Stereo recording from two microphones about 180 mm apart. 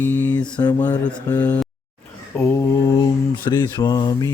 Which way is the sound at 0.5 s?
20° left (ahead or behind).